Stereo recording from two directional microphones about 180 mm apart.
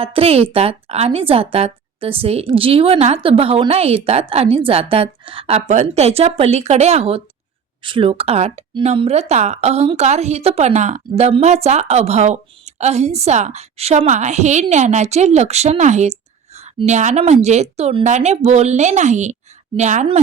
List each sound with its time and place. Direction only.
0.0 s a woman's voice: 30° right (ahead or behind)